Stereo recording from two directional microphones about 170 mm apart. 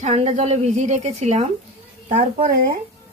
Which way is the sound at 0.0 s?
40° right (ahead or behind).